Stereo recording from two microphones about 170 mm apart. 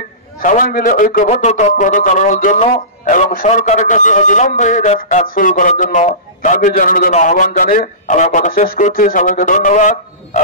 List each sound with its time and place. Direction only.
0.4 s a man's voice: 50° left (ahead or behind)